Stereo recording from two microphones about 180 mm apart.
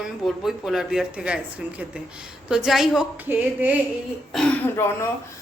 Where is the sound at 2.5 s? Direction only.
5° right (ahead or behind).